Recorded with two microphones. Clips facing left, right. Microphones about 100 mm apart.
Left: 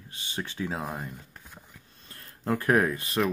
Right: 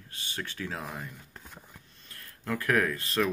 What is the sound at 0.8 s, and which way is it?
Speech, 40° left (ahead or behind).